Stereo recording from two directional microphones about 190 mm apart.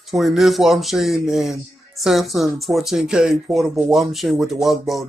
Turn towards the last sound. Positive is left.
turn(degrees=0)  # may be behind; listen again after turning